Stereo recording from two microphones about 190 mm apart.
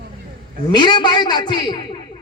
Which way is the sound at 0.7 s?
25° left (ahead or behind).